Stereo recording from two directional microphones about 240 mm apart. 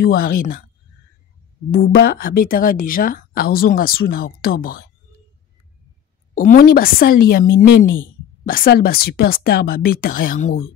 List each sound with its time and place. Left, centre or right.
0.0 s speech: left
1.7 s speech: left
6.3 s speech: left